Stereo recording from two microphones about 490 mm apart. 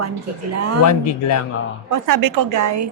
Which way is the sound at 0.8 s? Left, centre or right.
Left.